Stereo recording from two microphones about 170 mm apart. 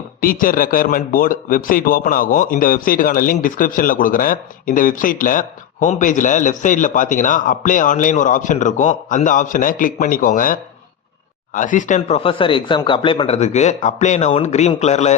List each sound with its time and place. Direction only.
0.2 s speech: 55° left (ahead or behind); by 15.1 s 40° left (ahead or behind)